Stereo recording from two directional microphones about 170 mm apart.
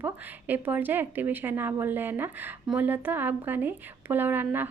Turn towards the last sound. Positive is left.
turn(degrees=-10)  # may be behind; listen again after turning